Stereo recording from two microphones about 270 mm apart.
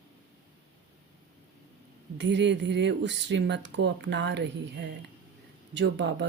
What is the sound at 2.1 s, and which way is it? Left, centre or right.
Speech, right.